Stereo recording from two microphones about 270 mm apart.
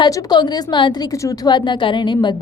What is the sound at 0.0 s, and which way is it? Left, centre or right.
A woman's voice, centre.